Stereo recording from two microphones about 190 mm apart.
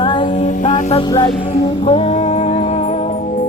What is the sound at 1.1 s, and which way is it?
Music, 25° left (ahead or behind).